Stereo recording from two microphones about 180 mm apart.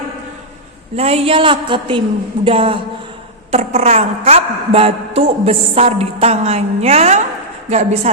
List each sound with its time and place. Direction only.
0.9 s a woman's voice: 35° right (ahead or behind)